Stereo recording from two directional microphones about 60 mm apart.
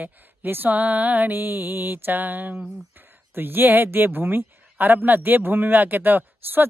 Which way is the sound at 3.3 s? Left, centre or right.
Right.